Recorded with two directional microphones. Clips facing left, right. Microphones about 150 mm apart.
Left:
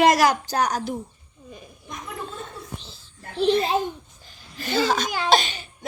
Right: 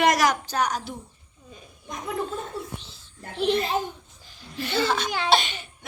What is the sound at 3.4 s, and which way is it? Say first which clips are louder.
A child's voice: left 3 dB; 35° left (ahead or behind).